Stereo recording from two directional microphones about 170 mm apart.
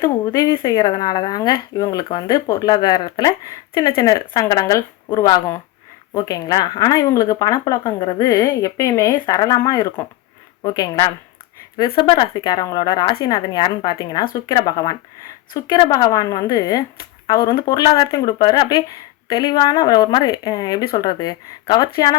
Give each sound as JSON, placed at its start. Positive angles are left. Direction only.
{"t": 0.3, "sound": "speech", "side_deg": 15}
{"t": 11.9, "sound": "speech", "side_deg": 30}